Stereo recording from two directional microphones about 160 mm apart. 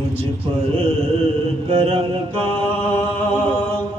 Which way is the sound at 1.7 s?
35° right (ahead or behind).